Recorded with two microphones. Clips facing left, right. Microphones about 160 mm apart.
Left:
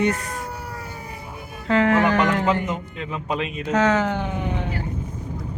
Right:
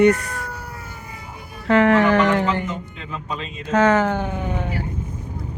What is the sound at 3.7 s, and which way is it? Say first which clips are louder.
Speech: right 3 dB; 55° right (ahead or behind).